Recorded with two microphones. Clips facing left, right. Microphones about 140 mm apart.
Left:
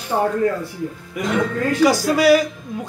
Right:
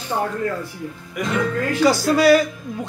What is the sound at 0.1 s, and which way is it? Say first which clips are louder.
Speech: left 4 dB; 45° left (ahead or behind).